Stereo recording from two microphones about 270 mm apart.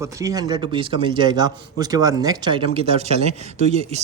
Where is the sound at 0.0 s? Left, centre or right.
Centre.